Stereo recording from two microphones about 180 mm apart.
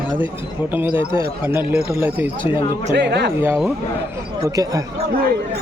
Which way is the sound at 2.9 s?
70° right (ahead or behind).